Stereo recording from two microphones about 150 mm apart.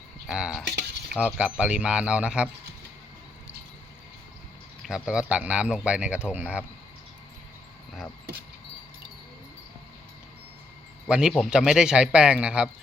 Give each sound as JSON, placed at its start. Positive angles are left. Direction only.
{"t": 0.3, "sound": "a man's voice", "side_deg": -5}
{"t": 4.8, "sound": "speech", "side_deg": -5}
{"t": 11.1, "sound": "a man's voice", "side_deg": -5}